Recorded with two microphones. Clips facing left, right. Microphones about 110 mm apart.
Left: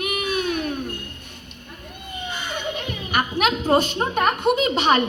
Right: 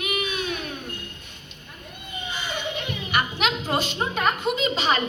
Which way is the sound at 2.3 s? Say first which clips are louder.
Left 1 dB; 50° left (ahead or behind).